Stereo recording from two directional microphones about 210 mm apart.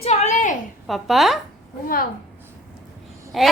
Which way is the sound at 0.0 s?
35° left (ahead or behind).